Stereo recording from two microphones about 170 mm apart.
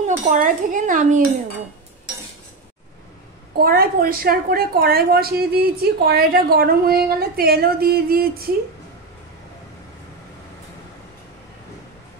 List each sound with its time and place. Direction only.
0.0 s dishes: 50° right (ahead or behind)
3.5 s a woman's voice: 60° right (ahead or behind)